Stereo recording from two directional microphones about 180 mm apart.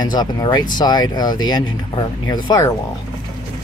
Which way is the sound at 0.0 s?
25° left (ahead or behind).